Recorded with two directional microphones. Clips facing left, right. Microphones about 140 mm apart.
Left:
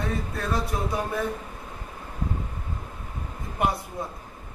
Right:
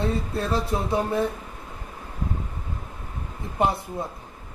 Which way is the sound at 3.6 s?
25° right (ahead or behind).